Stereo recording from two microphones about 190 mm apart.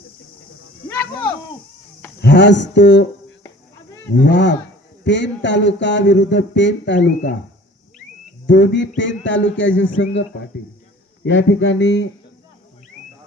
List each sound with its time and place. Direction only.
2.2 s speech: 65° left (ahead or behind)
8.4 s speech: 70° left (ahead or behind)
11.2 s speech: 90° left